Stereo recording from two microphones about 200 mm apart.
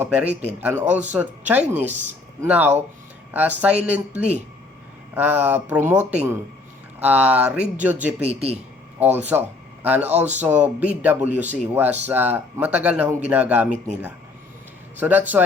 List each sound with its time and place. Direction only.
0.0 s a man's voice: 5° right (ahead or behind)
8.2 s speech: 30° right (ahead or behind)
9.1 s a man's voice: 10° right (ahead or behind)
10.0 s a man's voice: 35° right (ahead or behind)
10.4 s a man's voice: 10° right (ahead or behind)
14.9 s a man's voice: 10° right (ahead or behind)